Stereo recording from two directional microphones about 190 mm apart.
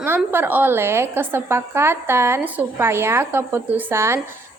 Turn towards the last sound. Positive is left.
turn(degrees=-15)  # may be behind; listen again after turning